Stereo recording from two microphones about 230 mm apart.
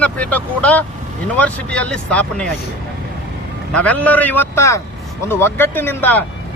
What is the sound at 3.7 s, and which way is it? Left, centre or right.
Speech, centre.